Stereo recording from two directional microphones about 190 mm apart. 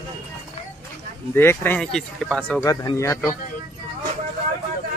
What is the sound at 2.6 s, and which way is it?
Speech, 20° left (ahead or behind).